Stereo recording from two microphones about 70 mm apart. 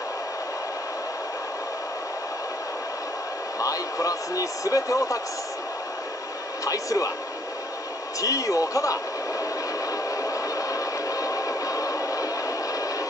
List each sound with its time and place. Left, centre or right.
3.5 s speech: left
6.6 s speech: left
8.2 s speech: left
10.0 s a sound: left